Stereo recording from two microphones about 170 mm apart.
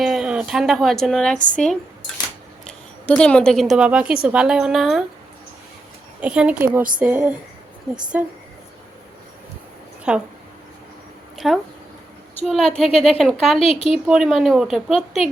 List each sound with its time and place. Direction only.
0.0 s a woman's voice: 5° right (ahead or behind)
3.1 s a woman's voice: 5° left (ahead or behind)
6.1 s a woman's voice: 5° right (ahead or behind)
10.1 s a woman's voice: 5° right (ahead or behind)
11.3 s a woman's voice: centre (ahead or behind)
13.6 s speech: 35° left (ahead or behind)
14.1 s a woman's voice: 5° right (ahead or behind)